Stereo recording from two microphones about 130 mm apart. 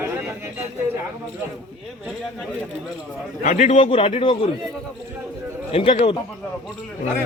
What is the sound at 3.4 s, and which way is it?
Speech, 60° left (ahead or behind).